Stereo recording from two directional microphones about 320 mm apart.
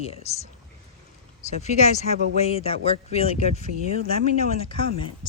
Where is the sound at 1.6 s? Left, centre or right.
Left.